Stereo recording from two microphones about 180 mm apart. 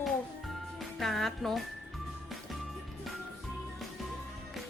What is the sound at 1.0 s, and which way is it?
Speech, centre (ahead or behind).